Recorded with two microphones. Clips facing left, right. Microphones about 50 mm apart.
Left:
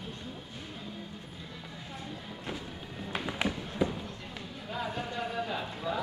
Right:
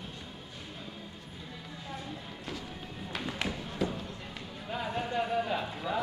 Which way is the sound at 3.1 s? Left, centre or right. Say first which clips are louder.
Left 3 dB; centre.